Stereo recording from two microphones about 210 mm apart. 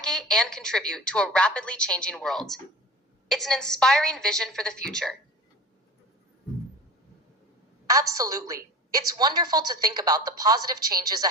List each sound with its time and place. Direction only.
0.0 s a woman's voice: 5° left (ahead or behind)
7.9 s a woman's voice: 15° right (ahead or behind)